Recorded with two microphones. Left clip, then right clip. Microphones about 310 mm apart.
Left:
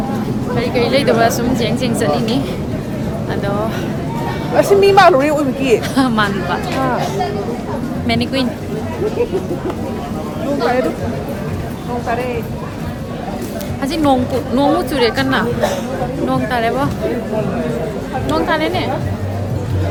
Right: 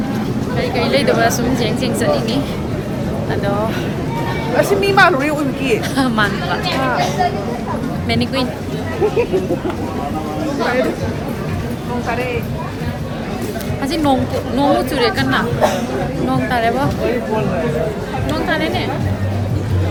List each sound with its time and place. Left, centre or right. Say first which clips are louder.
0.5 s speech: left 2 dB; centre
4.5 s speech: left 4 dB; left
6.0 s speech: left 1 dB; centre
8.0 s speech: left 1 dB; centre
13.8 s speech: left 2 dB; centre
18.3 s speech: left 3 dB; centre